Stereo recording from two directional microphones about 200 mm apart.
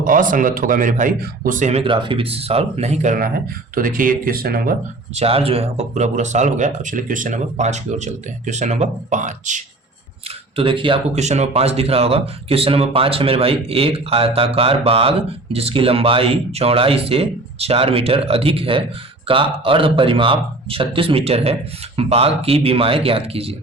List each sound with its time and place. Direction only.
0.0 s speech: 40° right (ahead or behind)
5.1 s speech: 30° right (ahead or behind)
10.6 s speech: 25° right (ahead or behind)